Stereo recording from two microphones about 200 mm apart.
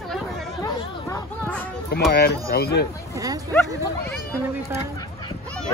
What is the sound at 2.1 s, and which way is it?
Speech, 50° left (ahead or behind).